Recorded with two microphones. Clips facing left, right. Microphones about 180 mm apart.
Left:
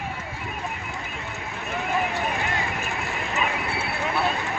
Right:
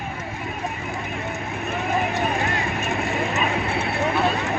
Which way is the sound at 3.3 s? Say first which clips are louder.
Right 4 dB; 20° right (ahead or behind).